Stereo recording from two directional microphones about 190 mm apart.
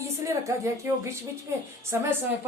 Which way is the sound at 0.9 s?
15° right (ahead or behind).